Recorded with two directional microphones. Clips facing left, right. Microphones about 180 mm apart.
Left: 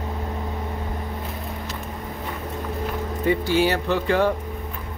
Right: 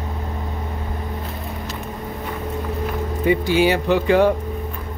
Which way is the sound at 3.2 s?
15° right (ahead or behind).